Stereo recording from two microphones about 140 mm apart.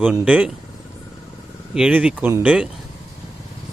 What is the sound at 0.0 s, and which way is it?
Speech, 10° right (ahead or behind).